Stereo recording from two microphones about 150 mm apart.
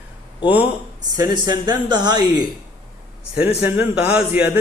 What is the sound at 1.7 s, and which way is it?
Speech, 30° right (ahead or behind).